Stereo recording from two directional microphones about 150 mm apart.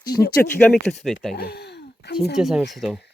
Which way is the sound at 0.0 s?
90° left.